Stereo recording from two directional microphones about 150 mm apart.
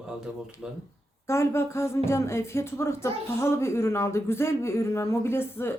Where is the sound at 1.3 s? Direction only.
15° left (ahead or behind).